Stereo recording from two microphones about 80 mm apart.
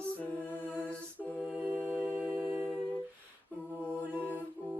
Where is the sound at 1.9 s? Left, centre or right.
Centre.